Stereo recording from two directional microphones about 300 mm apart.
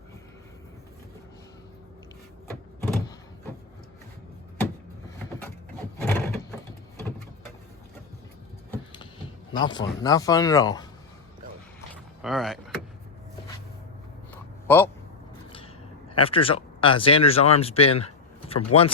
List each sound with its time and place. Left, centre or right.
6.0 s a sound: centre
8.7 s a sound: centre
9.5 s speech: centre
12.2 s power windows: centre
14.7 s speech: centre
16.1 s speech: centre